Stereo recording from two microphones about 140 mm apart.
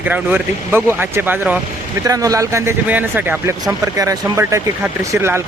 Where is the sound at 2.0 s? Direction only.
25° right (ahead or behind).